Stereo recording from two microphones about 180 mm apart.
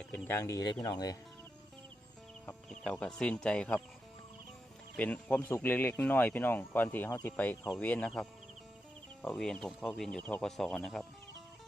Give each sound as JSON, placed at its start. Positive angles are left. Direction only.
{"t": 0.0, "sound": "speech", "side_deg": 5}
{"t": 2.5, "sound": "speech", "side_deg": 5}
{"t": 4.9, "sound": "speech", "side_deg": 10}